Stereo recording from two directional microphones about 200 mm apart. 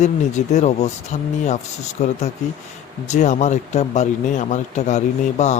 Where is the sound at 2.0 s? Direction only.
35° left (ahead or behind).